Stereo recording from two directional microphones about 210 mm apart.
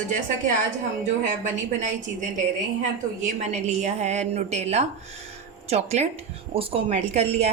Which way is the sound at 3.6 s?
35° right (ahead or behind).